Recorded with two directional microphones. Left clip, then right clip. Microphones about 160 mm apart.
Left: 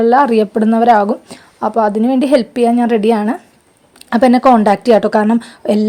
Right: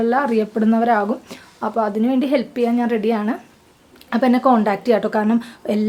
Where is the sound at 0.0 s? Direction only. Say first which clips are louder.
Left 8 dB; 40° left (ahead or behind).